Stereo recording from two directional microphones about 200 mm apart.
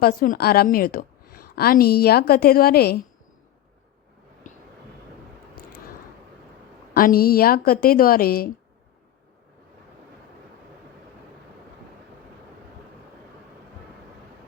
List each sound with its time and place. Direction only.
0.0 s a woman's voice: 45° left (ahead or behind)
4.4 s vehicle: 40° left (ahead or behind)
6.9 s a woman's voice: 45° left (ahead or behind)